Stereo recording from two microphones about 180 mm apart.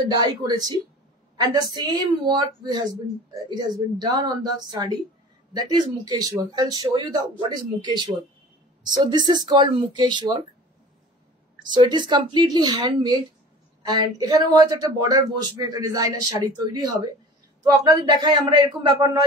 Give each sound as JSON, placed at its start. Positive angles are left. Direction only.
{"t": 0.1, "sound": "speech", "side_deg": -20}
{"t": 11.7, "sound": "speech", "side_deg": -25}